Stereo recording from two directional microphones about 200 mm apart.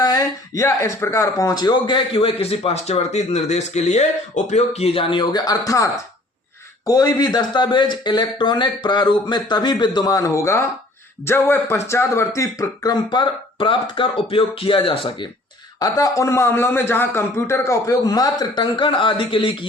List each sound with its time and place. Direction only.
0.0 s a man's voice: 20° left (ahead or behind)